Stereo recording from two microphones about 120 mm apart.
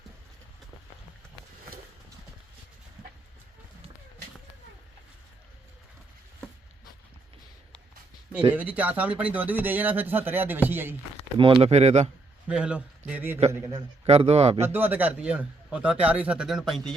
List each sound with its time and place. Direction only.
8.5 s speech: 15° right (ahead or behind)
11.3 s speech: 45° right (ahead or behind)
11.7 s a man's voice: 65° right (ahead or behind)
12.5 s speech: 10° right (ahead or behind)
14.0 s a man's voice: 60° right (ahead or behind)
14.7 s speech: 15° right (ahead or behind); by 16.9 s centre (ahead or behind)